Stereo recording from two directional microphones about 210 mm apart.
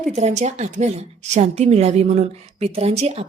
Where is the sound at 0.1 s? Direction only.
35° right (ahead or behind).